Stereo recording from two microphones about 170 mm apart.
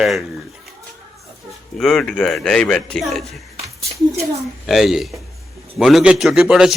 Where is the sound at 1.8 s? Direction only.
5° left (ahead or behind).